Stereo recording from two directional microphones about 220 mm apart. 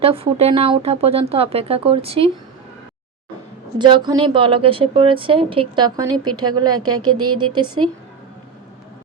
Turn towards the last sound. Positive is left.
turn(degrees=-20)  # may be behind; listen again after turning